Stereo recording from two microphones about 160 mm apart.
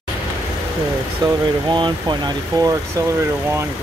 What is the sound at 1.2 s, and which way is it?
Speech, 25° right (ahead or behind).